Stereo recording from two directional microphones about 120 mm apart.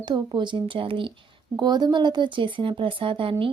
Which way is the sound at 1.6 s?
35° right (ahead or behind).